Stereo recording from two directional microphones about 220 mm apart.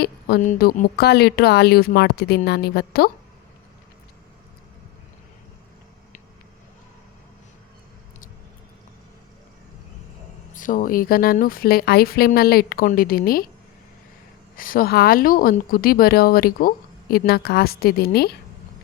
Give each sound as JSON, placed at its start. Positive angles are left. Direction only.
{"t": 0.0, "sound": "speech", "side_deg": 40}
{"t": 10.5, "sound": "speech", "side_deg": 35}
{"t": 14.5, "sound": "speech", "side_deg": 40}